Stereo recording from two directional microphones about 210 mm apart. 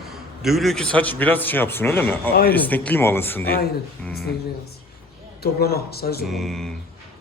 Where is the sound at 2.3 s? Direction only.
45° left (ahead or behind).